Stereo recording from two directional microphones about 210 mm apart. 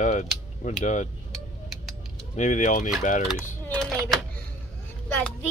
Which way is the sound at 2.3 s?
35° left (ahead or behind).